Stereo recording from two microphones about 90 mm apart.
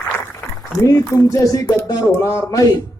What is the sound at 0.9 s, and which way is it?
Speech, 35° left (ahead or behind).